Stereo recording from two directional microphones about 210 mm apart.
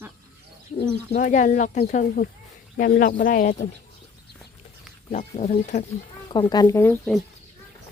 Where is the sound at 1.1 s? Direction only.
35° left (ahead or behind).